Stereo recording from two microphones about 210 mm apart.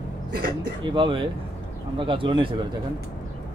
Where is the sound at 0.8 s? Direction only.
25° right (ahead or behind).